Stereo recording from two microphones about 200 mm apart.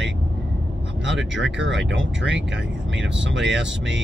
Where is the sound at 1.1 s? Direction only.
65° right (ahead or behind).